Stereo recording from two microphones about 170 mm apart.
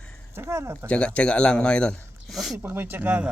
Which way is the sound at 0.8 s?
5° left (ahead or behind).